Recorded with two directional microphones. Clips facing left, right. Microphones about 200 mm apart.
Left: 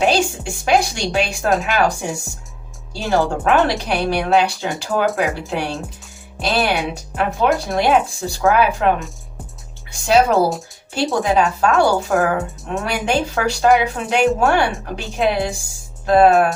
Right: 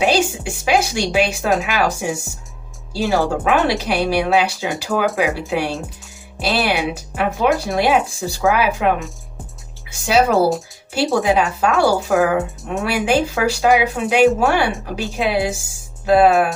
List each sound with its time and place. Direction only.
0.0 s speech: 5° right (ahead or behind)